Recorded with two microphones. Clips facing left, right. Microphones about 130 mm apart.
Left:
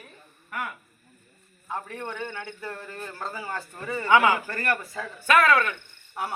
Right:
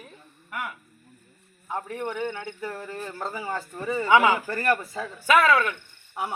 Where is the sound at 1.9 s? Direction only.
15° right (ahead or behind).